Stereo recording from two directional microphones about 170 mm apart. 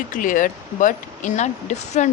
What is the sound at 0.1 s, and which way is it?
Speech, 50° left (ahead or behind).